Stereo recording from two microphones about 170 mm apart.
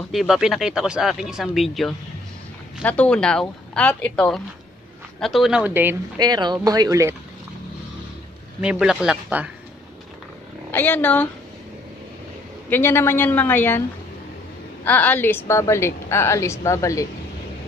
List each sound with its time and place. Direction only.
0.1 s a woman's voice: centre (ahead or behind)
6.1 s speech: 25° right (ahead or behind)
8.5 s speech: 5° right (ahead or behind)
10.7 s a woman's voice: 10° left (ahead or behind)
12.6 s a woman's voice: 10° left (ahead or behind)
14.9 s a woman's voice: 10° left (ahead or behind)